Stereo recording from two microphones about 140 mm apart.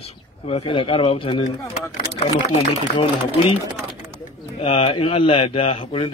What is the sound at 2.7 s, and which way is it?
Speech, 40° left (ahead or behind).